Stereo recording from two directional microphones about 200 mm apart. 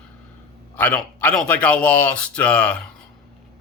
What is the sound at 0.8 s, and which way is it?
Speech, 5° left (ahead or behind).